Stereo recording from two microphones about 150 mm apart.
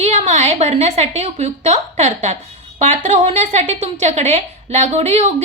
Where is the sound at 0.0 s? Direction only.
50° right (ahead or behind).